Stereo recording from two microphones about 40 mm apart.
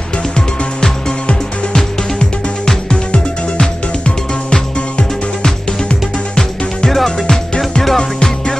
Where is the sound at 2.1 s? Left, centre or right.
Left.